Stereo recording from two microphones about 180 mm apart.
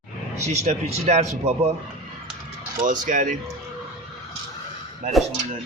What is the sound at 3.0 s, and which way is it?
Speech, 45° right (ahead or behind).